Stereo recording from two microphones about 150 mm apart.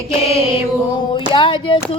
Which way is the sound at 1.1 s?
35° left (ahead or behind).